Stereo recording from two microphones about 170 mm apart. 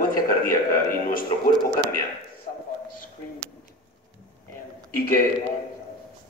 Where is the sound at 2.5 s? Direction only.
45° left (ahead or behind).